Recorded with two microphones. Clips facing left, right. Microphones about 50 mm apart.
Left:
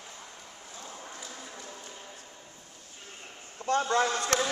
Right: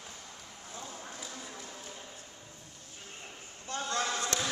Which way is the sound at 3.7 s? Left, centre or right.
Left.